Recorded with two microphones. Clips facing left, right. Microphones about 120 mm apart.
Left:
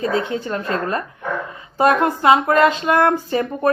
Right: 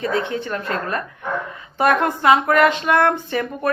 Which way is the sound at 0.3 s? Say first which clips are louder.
Left 2 dB; 30° left (ahead or behind).